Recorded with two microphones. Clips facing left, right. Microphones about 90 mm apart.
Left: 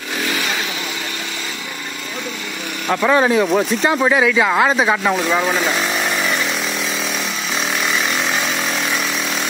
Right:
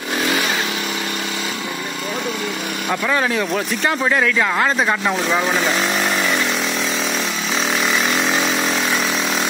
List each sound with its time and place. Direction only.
2.9 s speech: 15° left (ahead or behind)
8.1 s engine: centre (ahead or behind)